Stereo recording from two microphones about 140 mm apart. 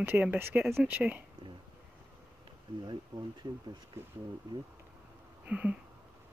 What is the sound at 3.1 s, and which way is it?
Speech, 30° right (ahead or behind).